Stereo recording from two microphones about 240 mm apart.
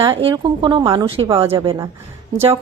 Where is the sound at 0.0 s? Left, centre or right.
Right.